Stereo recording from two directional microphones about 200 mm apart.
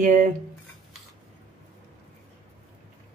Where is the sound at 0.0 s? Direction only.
40° right (ahead or behind).